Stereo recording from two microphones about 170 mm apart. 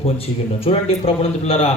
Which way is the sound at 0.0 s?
35° left (ahead or behind).